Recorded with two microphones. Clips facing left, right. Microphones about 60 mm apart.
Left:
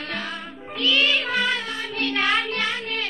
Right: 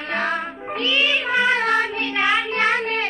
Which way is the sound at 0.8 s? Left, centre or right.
Centre.